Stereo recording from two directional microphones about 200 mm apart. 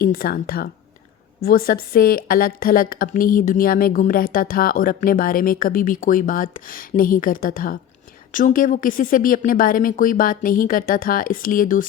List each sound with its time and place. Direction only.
0.0 s a woman's voice: 50° left (ahead or behind)